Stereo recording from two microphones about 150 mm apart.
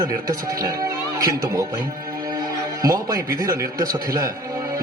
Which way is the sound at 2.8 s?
25° right (ahead or behind).